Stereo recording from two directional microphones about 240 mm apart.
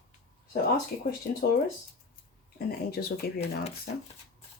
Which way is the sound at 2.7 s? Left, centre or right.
Left.